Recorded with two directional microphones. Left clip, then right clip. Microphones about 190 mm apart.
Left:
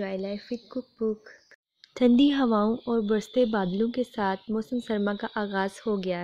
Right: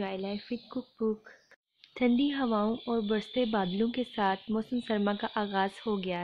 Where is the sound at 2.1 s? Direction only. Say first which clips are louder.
Left 8 dB; 40° left (ahead or behind).